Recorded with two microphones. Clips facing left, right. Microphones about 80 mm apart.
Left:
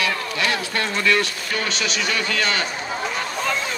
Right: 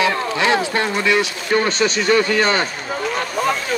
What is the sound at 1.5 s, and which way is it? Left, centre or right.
Speech, right.